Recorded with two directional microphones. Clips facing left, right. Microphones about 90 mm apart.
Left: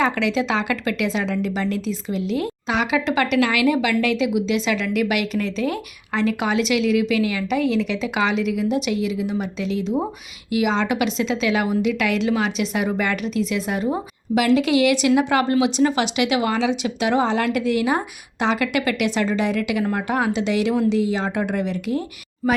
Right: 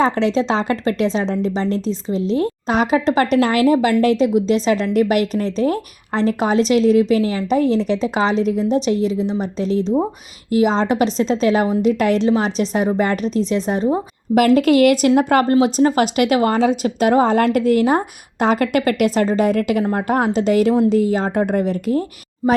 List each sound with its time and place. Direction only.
0.0 s a woman's voice: 35° right (ahead or behind)
14.3 s a woman's voice: 45° right (ahead or behind)